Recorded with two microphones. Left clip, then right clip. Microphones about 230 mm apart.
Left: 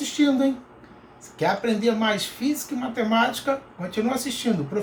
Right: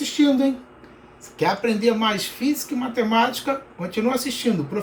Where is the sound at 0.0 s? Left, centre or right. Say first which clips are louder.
Right 2 dB; centre.